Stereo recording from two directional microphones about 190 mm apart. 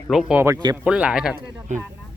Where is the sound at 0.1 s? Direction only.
5° right (ahead or behind).